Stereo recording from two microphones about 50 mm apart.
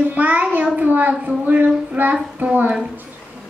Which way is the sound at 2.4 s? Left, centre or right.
Right.